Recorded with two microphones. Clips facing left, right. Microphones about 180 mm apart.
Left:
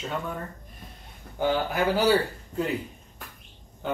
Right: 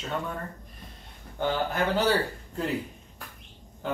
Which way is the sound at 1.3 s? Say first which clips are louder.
Left 2 dB; 10° left (ahead or behind).